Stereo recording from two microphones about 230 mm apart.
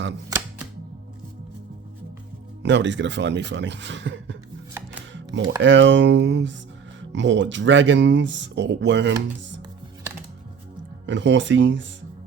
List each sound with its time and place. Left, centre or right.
2.6 s speech: right
5.1 s music: right
5.6 s speech: right
11.0 s speech: right